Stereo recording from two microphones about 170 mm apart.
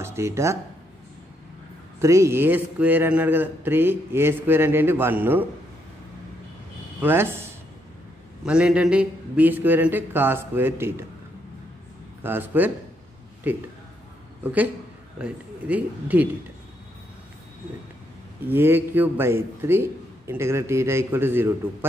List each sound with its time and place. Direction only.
0.0 s speech: 15° right (ahead or behind)
2.0 s a man's voice: 15° right (ahead or behind)
7.0 s a man's voice: 10° right (ahead or behind)
8.5 s a man's voice: 5° right (ahead or behind)
12.2 s a man's voice: 10° right (ahead or behind)
18.4 s a man's voice: 15° right (ahead or behind)